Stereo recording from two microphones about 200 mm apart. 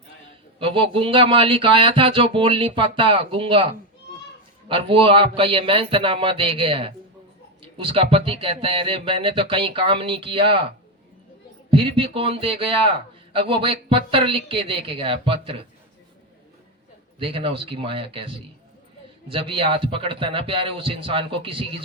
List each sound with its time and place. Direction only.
0.6 s speech: 25° right (ahead or behind)
4.7 s speech: 25° right (ahead or behind)
11.7 s speech: 25° right (ahead or behind)
17.2 s speech: 25° right (ahead or behind)